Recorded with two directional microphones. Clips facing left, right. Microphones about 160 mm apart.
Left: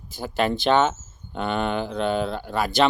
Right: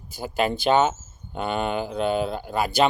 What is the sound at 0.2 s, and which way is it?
Speech, 10° right (ahead or behind).